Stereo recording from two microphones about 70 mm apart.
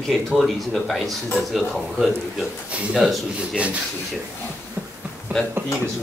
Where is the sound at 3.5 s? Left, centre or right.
Centre.